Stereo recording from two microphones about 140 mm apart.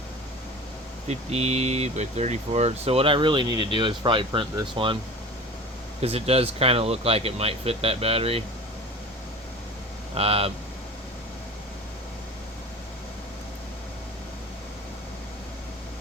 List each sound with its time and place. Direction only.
1.0 s speech: 50° right (ahead or behind); by 4.9 s 35° right (ahead or behind)
6.0 s speech: 45° right (ahead or behind)
10.2 s speech: 45° right (ahead or behind)